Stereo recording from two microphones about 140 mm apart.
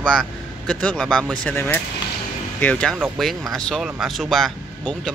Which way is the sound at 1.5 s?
15° left (ahead or behind).